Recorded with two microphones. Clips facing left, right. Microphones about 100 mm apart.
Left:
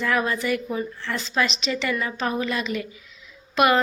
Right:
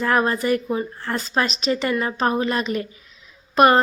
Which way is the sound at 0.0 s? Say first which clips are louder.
Right 4 dB; 40° right (ahead or behind).